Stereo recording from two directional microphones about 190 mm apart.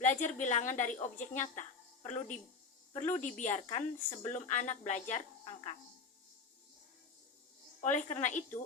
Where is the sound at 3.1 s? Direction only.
40° left (ahead or behind).